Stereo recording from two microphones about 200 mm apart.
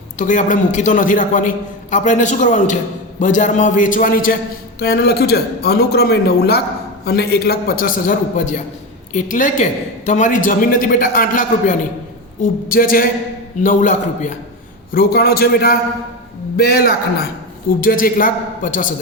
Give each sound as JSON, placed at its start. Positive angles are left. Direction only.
{"t": 0.2, "sound": "a man's voice", "side_deg": 40}